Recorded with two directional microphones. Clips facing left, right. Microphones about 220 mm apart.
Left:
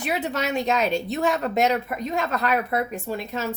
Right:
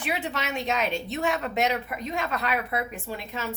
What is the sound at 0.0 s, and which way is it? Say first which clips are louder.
Speech: left 4 dB; 40° left (ahead or behind).